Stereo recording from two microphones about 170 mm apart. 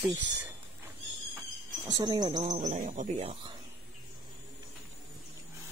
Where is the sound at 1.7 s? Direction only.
25° right (ahead or behind).